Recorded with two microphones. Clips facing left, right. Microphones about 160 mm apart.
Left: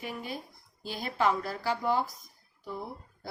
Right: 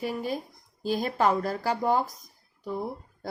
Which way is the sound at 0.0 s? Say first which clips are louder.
Right 7 dB; 40° right (ahead or behind).